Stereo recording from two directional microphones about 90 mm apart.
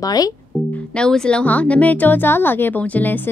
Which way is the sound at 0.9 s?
10° left (ahead or behind).